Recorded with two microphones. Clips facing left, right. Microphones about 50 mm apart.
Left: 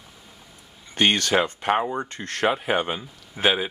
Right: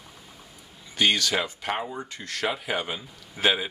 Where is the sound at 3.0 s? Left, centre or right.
Centre.